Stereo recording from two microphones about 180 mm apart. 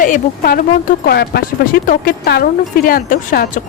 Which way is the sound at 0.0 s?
50° left (ahead or behind).